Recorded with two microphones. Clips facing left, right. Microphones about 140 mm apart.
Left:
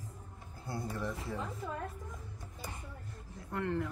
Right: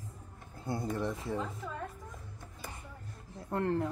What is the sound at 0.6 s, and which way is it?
Speech, 20° right (ahead or behind).